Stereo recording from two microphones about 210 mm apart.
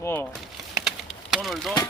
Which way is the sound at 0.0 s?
10° left (ahead or behind).